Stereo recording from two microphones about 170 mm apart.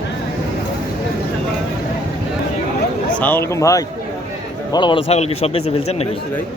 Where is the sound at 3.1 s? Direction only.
10° left (ahead or behind); by 5.0 s 25° left (ahead or behind).